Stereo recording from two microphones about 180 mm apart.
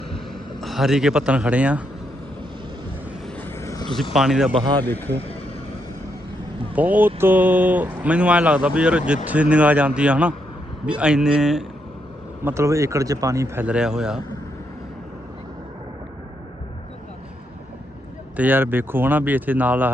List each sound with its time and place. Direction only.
0.6 s speech: centre (ahead or behind)
3.2 s vehicle: 10° left (ahead or behind)
4.1 s speech: 5° right (ahead or behind)
4.5 s speech: 25° right (ahead or behind)
4.8 s a man's voice: 10° left (ahead or behind)
6.7 s speech: 10° right (ahead or behind)
12.5 s speech: 15° right (ahead or behind)
13.7 s speech: 5° right (ahead or behind)
18.3 s speech: 10° right (ahead or behind)